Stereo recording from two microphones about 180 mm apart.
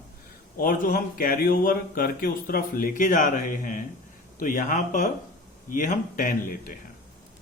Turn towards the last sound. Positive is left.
turn(degrees=50)  # may be behind; listen again after turning